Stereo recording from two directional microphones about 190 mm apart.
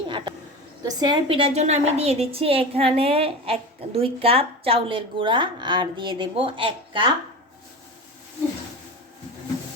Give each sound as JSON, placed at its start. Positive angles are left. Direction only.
{"t": 0.9, "sound": "a woman's voice", "side_deg": -20}